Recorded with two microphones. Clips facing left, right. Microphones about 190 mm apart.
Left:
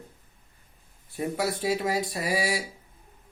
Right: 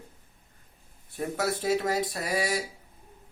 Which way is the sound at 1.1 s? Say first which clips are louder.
Left 1 dB; 5° left (ahead or behind).